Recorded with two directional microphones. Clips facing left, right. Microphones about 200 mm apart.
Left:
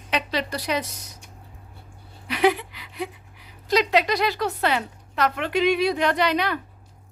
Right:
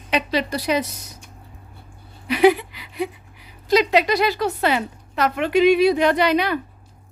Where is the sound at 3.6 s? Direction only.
5° right (ahead or behind).